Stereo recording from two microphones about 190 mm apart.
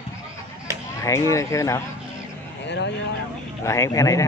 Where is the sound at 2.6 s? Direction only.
65° left (ahead or behind).